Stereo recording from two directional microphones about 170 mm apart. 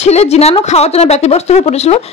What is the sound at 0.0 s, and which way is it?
Speech, 40° left (ahead or behind).